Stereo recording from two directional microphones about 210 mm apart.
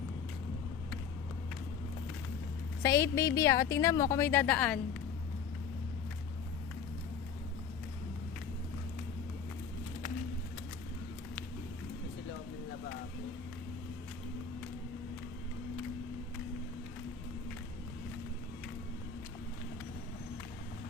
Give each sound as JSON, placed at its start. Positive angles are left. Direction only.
{"t": 2.8, "sound": "a woman's voice", "side_deg": 15}